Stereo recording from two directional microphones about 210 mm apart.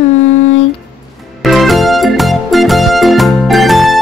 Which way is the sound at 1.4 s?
Centre (ahead or behind).